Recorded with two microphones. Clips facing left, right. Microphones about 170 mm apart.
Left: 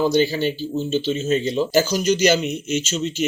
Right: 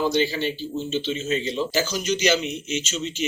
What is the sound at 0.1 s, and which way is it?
Speech, 40° left (ahead or behind).